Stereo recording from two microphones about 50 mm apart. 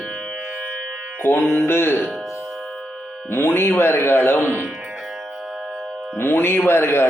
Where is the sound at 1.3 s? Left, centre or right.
Left.